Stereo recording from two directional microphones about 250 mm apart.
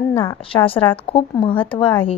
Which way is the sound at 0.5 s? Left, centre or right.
Left.